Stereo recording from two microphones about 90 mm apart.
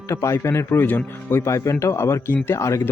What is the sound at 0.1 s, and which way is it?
Speech, 35° left (ahead or behind).